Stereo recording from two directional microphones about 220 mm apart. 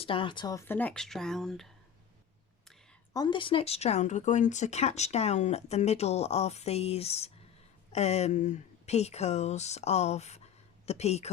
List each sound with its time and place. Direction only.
0.0 s speech: 25° left (ahead or behind); by 1.7 s centre (ahead or behind)
3.1 s speech: 20° left (ahead or behind)